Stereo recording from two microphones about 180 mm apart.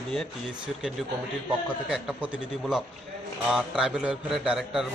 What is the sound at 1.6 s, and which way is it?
A man's voice, 5° right (ahead or behind).